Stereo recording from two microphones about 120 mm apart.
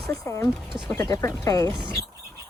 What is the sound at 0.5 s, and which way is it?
Speech, centre (ahead or behind).